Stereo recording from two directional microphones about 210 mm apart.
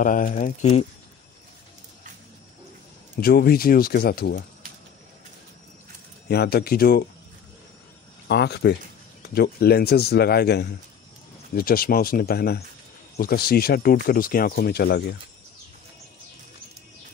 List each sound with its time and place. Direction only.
0.0 s speech: 40° left (ahead or behind)
3.2 s speech: 45° left (ahead or behind)
6.2 s speech: 50° left (ahead or behind)
8.3 s speech: 50° left (ahead or behind)